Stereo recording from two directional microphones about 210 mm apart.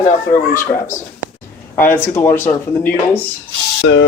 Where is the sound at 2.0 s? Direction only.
10° left (ahead or behind).